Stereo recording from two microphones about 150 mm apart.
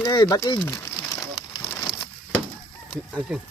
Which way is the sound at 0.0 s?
25° left (ahead or behind).